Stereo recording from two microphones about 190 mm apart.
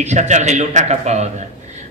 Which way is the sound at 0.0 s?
40° right (ahead or behind).